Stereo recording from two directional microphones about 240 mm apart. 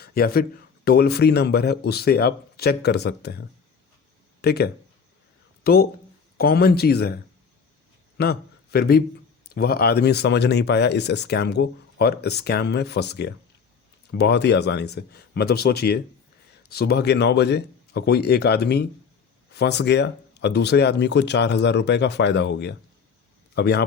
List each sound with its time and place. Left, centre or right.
0.0 s speech: left
4.4 s speech: left
8.2 s speech: left